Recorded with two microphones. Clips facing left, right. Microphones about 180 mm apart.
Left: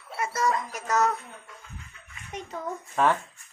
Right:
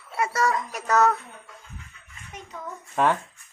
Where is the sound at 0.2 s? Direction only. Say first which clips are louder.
Right 2 dB; 70° right (ahead or behind).